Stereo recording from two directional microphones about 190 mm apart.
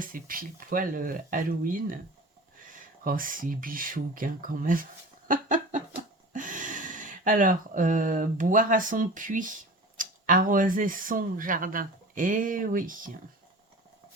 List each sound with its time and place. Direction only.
0.0 s speech: 50° right (ahead or behind)
5.3 s a sound: 40° right (ahead or behind)
6.3 s speech: 45° right (ahead or behind)